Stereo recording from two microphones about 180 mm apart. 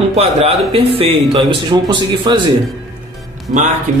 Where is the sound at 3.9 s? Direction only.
40° right (ahead or behind).